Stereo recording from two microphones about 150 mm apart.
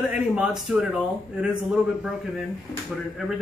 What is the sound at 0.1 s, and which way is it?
A man's voice, 5° right (ahead or behind).